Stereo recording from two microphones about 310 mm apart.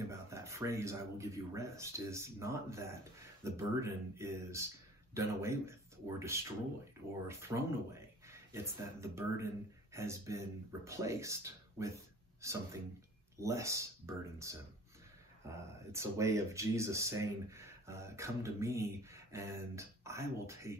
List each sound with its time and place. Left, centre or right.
0.0 s speech: centre